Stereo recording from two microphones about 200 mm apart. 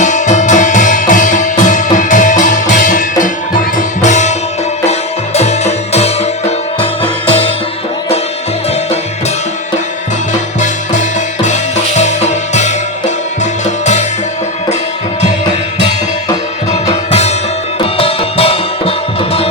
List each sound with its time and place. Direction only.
0.0 s music: 35° left (ahead or behind)
11.4 s music: 35° left (ahead or behind)
17.1 s music: 30° left (ahead or behind)